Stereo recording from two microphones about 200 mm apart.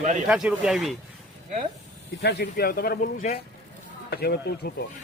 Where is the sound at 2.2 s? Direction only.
55° left (ahead or behind).